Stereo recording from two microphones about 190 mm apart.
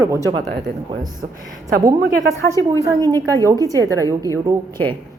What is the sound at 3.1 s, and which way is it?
Speech, 15° left (ahead or behind).